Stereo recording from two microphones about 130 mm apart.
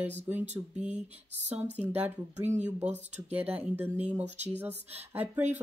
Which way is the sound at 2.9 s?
60° right (ahead or behind).